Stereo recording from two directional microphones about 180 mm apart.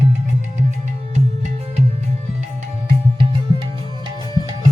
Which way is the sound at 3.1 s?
30° right (ahead or behind).